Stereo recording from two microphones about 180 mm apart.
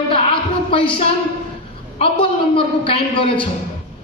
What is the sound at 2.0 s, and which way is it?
A man's voice, 30° left (ahead or behind).